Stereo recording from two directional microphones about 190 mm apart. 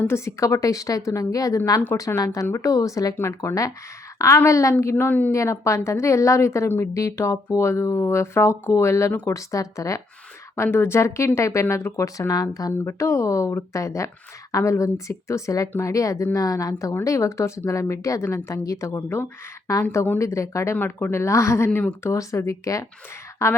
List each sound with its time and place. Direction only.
0.0 s speech: 15° left (ahead or behind)